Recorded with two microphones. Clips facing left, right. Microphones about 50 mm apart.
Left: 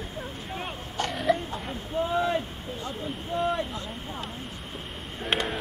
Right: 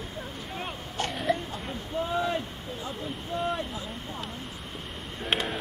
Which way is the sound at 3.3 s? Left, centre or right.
Left.